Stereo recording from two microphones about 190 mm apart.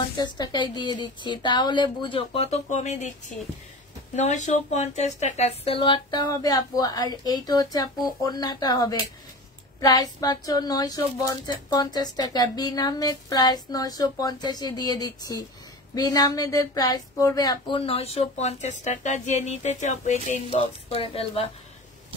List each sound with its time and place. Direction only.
0.2 s a woman's voice: 20° left (ahead or behind)